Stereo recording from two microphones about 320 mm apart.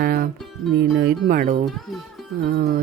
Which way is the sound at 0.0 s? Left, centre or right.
Right.